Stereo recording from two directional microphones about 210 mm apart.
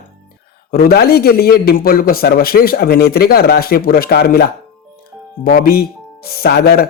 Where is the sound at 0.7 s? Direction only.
45° left (ahead or behind).